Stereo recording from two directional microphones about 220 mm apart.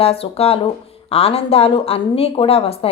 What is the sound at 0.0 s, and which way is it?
A woman's voice, 25° left (ahead or behind).